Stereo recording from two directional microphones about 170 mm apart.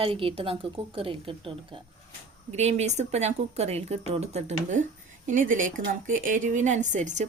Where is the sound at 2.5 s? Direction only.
40° right (ahead or behind).